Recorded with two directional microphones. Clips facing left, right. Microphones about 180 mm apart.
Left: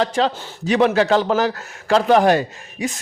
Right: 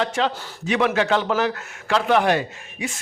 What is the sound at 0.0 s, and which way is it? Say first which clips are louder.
A man's voice: left 4 dB; 35° left (ahead or behind).